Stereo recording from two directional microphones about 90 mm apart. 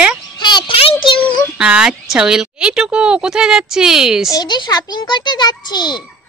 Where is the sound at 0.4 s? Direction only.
60° left (ahead or behind); by 1.2 s 85° left.